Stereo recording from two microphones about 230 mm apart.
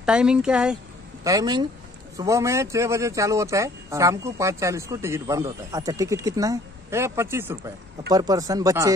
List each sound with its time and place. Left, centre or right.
0.0 s speech: centre
1.2 s speech: centre